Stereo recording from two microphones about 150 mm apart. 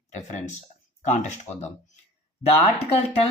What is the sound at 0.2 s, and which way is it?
Speech, 50° left (ahead or behind).